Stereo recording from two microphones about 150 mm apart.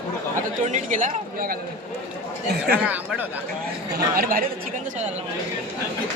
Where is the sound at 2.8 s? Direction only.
10° right (ahead or behind).